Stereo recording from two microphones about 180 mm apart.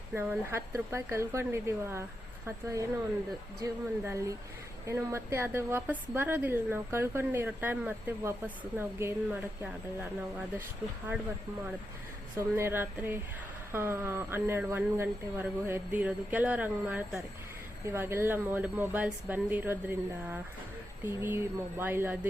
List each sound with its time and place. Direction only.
0.1 s a woman's voice: 10° right (ahead or behind)
3.6 s a woman's voice: 15° right (ahead or behind)
12.4 s a woman's voice: 15° right (ahead or behind)